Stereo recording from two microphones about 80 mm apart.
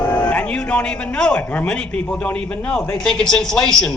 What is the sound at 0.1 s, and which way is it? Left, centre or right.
A man's voice, left.